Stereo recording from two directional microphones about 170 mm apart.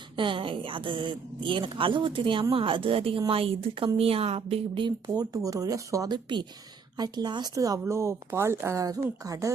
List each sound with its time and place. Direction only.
0.2 s speech: 30° right (ahead or behind)